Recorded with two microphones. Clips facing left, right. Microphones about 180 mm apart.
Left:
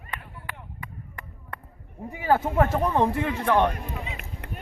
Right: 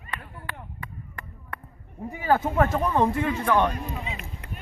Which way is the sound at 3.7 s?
60° left (ahead or behind).